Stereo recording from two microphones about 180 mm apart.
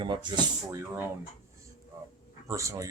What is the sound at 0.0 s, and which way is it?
Speech, 25° right (ahead or behind).